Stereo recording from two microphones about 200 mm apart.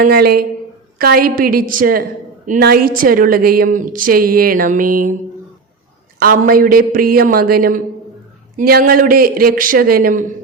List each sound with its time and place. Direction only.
0.0 s a woman's voice: 50° right (ahead or behind)
6.4 s a woman's voice: 45° right (ahead or behind)